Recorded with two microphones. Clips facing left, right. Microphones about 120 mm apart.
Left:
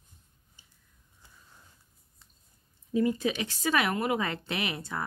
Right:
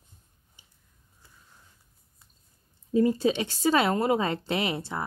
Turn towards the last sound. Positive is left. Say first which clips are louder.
# right 4 dB
turn(degrees=-25)  # may be behind; listen again after turning